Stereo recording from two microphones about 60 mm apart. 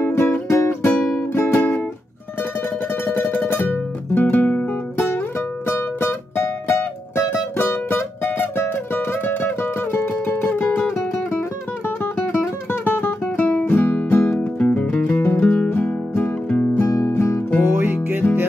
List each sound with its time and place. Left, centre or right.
0.0 s music: left
3.1 s music: left
12.8 s music: left
14.6 s music: left
15.4 s music: centre
15.7 s music: left
16.4 s music: left
16.7 s music: left
17.6 s music: right